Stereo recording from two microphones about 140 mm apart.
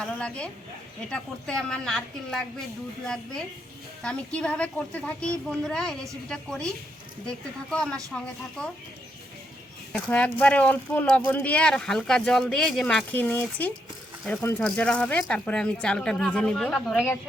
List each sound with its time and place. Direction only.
0.0 s speech: 5° left (ahead or behind)
4.0 s a woman's voice: 5° left (ahead or behind)
9.9 s a woman's voice: 10° left (ahead or behind)